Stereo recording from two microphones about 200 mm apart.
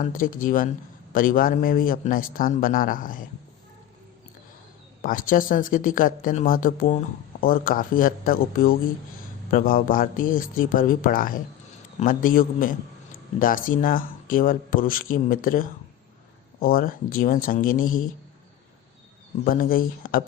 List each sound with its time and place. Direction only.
0.0 s speech: 45° left (ahead or behind)
5.0 s speech: 45° left (ahead or behind)
19.5 s speech: 45° left (ahead or behind)